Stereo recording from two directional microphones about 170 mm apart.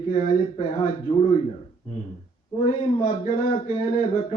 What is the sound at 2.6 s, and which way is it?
Speech, 30° left (ahead or behind).